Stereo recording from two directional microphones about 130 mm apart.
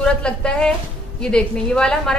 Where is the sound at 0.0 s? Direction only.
5° left (ahead or behind).